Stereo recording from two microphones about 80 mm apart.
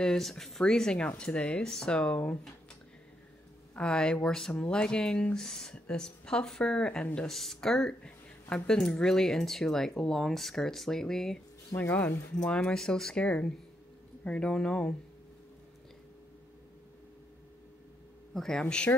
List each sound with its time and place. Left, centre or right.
0.0 s speech: centre
3.7 s speech: centre
11.7 s speech: left
12.4 s speech: centre
18.3 s speech: centre